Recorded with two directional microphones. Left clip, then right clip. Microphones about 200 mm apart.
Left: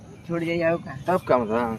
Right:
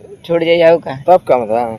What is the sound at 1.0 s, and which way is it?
Speech, 40° right (ahead or behind).